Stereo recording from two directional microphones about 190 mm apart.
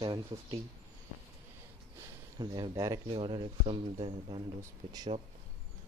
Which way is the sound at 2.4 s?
25° right (ahead or behind).